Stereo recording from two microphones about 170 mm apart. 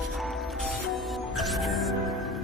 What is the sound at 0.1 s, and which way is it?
Music, centre (ahead or behind).